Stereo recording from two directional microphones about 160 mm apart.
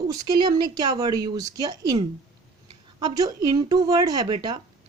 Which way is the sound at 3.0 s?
25° right (ahead or behind).